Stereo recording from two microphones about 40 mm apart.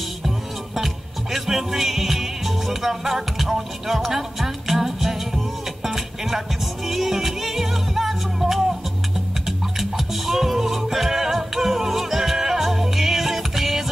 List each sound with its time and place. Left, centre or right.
0.7 s music: centre